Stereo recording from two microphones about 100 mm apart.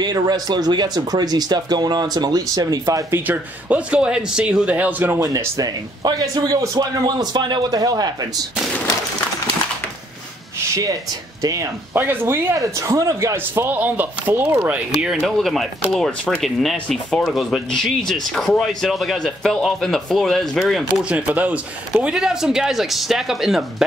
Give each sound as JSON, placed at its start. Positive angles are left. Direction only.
{"t": 0.0, "sound": "speech", "side_deg": -45}
{"t": 3.3, "sound": "a man's voice", "side_deg": -15}
{"t": 5.2, "sound": "a man's voice", "side_deg": -35}
{"t": 10.7, "sound": "a man's voice", "side_deg": -35}
{"t": 11.9, "sound": "speech", "side_deg": -20}
{"t": 12.5, "sound": "a man's voice", "side_deg": -35}
{"t": 13.7, "sound": "a man's voice", "side_deg": -20}
{"t": 15.0, "sound": "speech", "side_deg": -5}
{"t": 21.0, "sound": "a man's voice", "side_deg": -15}
{"t": 22.0, "sound": "speech", "side_deg": -5}